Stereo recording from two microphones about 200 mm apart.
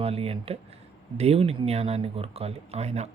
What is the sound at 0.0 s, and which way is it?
Speech, 30° right (ahead or behind).